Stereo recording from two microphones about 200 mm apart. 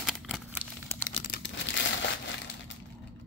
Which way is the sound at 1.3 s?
60° left (ahead or behind).